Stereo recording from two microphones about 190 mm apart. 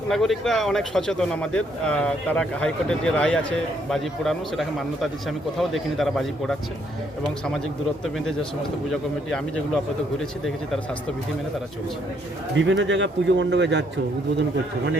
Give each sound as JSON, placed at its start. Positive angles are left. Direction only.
{"t": 0.1, "sound": "a man's voice", "side_deg": 0}
{"t": 8.9, "sound": "a man's voice", "side_deg": 0}
{"t": 12.5, "sound": "a man's voice", "side_deg": -70}